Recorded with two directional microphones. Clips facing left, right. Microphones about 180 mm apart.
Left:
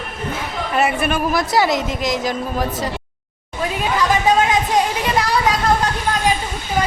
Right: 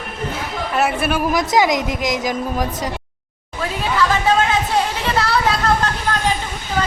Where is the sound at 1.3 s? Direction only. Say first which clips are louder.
Right 2 dB; 15° right (ahead or behind).